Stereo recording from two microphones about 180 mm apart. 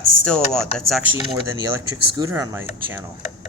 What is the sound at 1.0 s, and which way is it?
Speech, 10° right (ahead or behind).